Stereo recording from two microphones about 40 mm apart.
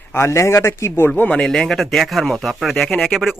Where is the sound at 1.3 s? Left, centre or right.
Centre.